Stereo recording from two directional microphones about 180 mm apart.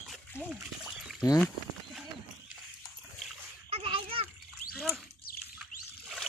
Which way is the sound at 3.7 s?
30° right (ahead or behind).